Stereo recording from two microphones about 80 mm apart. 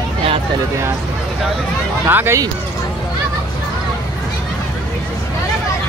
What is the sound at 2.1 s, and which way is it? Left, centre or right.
Speech, right.